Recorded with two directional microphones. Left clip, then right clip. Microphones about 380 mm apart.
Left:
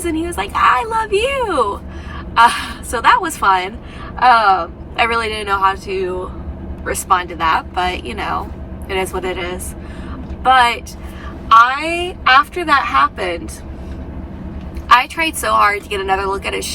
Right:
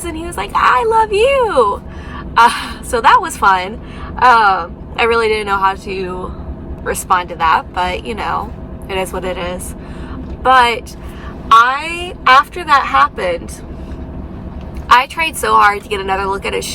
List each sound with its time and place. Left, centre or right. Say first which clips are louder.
0.0 s speech: left 2 dB; centre
14.8 s speech: right 1 dB; centre